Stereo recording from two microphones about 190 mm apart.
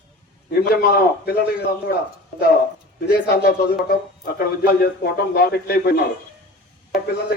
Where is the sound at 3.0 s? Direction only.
55° left (ahead or behind).